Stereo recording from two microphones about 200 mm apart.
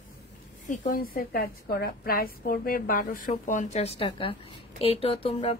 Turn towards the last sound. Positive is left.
turn(degrees=30)  # may be behind; listen again after turning